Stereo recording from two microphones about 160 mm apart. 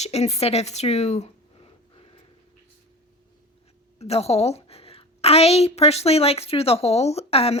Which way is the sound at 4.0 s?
40° left (ahead or behind).